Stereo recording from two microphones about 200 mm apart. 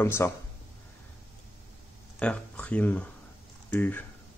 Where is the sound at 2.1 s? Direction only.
5° left (ahead or behind).